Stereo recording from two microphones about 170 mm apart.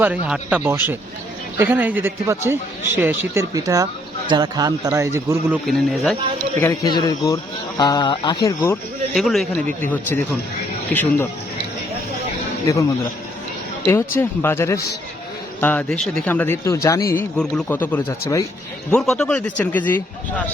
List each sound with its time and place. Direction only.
0.0 s a man's voice: 10° right (ahead or behind)
5.6 s speech: centre (ahead or behind)
6.6 s speech: 20° left (ahead or behind)
9.1 s a man's voice: centre (ahead or behind)
14.2 s a man's voice: 15° left (ahead or behind)
17.2 s a man's voice: 5° left (ahead or behind)
18.9 s a man's voice: 5° left (ahead or behind)